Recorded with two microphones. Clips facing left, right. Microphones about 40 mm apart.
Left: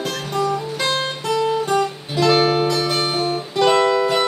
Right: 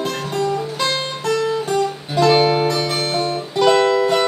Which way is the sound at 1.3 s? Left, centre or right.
Centre.